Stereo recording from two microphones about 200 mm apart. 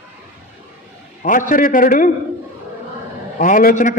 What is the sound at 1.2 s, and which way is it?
Speech, 40° left (ahead or behind).